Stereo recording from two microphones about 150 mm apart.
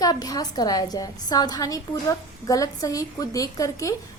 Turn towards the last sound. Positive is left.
turn(degrees=20)  # may be behind; listen again after turning